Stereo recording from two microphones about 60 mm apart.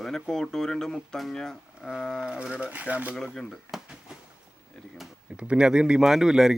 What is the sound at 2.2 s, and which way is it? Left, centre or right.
Speech, centre.